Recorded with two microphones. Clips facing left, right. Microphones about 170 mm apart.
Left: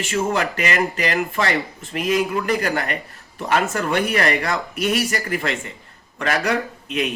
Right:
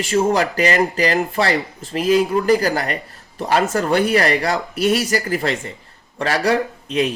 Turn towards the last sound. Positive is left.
turn(degrees=-35)  # may be behind; listen again after turning